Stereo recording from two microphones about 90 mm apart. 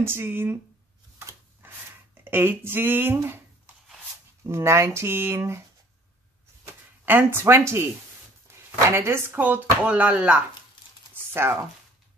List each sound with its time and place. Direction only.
0.0 s speech: 25° right (ahead or behind)
2.3 s speech: 25° right (ahead or behind)
4.5 s speech: 30° right (ahead or behind)
7.1 s speech: 25° right (ahead or behind)
8.5 s a sound: 30° right (ahead or behind)
8.9 s speech: 25° right (ahead or behind)